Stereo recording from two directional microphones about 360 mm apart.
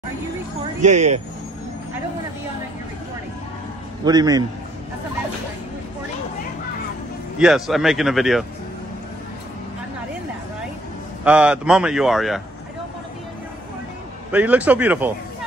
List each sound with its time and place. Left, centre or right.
0.8 s speech: centre
4.0 s a man's voice: centre
7.3 s speech: centre
11.2 s speech: centre
14.3 s speech: centre